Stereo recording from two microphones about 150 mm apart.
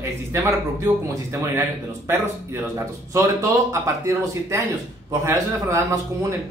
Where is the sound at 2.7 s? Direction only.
20° right (ahead or behind).